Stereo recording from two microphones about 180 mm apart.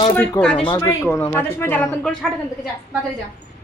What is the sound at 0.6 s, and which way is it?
Speech, 20° left (ahead or behind).